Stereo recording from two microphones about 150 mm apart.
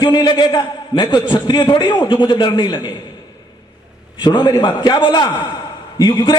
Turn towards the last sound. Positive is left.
turn(degrees=30)  # may be behind; listen again after turning